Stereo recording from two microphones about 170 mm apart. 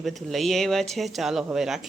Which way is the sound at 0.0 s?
Centre (ahead or behind).